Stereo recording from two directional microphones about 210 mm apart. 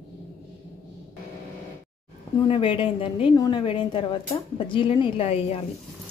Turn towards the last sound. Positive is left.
turn(degrees=30)  # may be behind; listen again after turning